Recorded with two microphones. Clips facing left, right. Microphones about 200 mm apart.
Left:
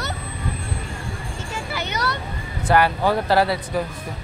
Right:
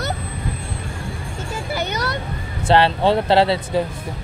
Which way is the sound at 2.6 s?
25° right (ahead or behind).